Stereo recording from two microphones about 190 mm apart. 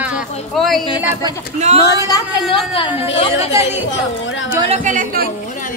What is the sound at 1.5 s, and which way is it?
Speech, 35° right (ahead or behind).